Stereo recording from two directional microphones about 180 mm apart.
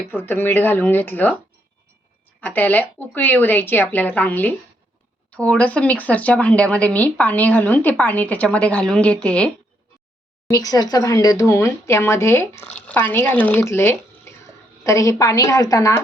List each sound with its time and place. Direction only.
0.1 s speech: 10° left (ahead or behind)
2.4 s speech: 10° left (ahead or behind)
10.5 s a woman's voice: 20° left (ahead or behind)